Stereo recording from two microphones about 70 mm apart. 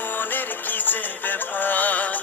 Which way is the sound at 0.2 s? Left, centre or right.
Left.